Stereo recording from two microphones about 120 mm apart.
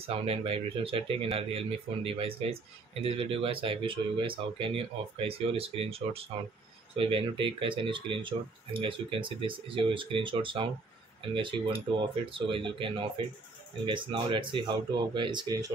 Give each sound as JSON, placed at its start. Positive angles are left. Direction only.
{"t": 0.0, "sound": "speech", "side_deg": -50}